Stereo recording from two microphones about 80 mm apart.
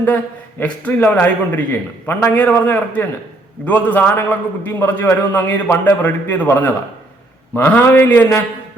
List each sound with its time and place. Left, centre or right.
0.6 s a man's voice: left